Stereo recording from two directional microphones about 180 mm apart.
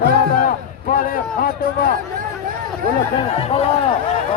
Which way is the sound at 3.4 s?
35° left (ahead or behind).